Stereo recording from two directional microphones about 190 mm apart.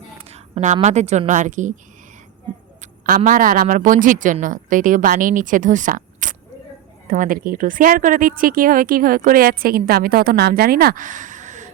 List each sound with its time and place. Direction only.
0.2 s a woman's voice: 30° right (ahead or behind)
2.8 s speech: 40° right (ahead or behind)